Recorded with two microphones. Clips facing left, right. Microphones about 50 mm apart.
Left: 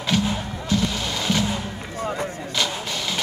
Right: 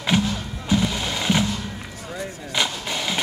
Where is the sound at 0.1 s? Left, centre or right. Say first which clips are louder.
Left 1 dB; right.